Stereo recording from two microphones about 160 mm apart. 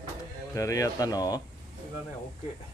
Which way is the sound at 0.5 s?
20° left (ahead or behind).